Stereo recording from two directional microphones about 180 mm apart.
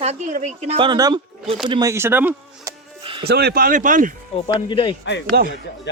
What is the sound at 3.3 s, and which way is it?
Speech, 60° right (ahead or behind).